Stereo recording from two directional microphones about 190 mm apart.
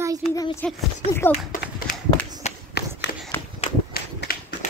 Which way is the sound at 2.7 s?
60° left (ahead or behind).